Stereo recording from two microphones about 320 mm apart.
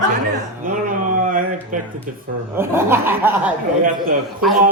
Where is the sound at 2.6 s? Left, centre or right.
Centre.